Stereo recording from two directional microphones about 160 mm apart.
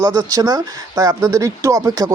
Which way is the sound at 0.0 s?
20° right (ahead or behind).